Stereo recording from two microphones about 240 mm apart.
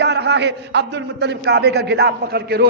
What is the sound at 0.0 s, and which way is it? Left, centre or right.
A man's voice, right.